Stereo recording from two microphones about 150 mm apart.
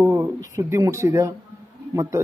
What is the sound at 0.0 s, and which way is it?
Speech, 20° right (ahead or behind).